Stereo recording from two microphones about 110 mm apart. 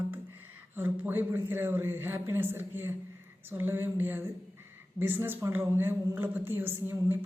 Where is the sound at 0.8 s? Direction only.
20° right (ahead or behind).